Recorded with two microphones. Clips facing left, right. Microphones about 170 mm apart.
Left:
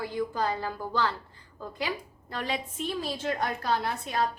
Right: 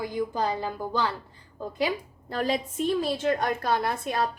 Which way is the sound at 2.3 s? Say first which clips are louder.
Right 6 dB; 35° right (ahead or behind).